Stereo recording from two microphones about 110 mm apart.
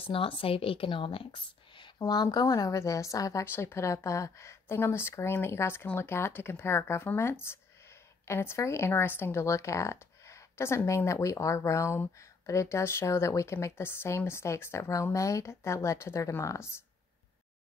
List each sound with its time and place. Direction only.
0.0 s a woman's voice: 55° left (ahead or behind)
2.0 s speech: 40° left (ahead or behind)